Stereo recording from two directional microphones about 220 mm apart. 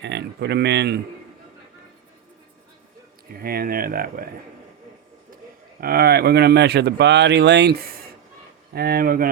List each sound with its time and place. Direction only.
0.0 s speech: 50° right (ahead or behind)
3.4 s speech: 40° right (ahead or behind)
5.8 s speech: 45° right (ahead or behind)